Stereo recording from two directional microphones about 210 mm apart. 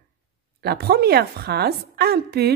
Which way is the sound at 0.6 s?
50° right (ahead or behind).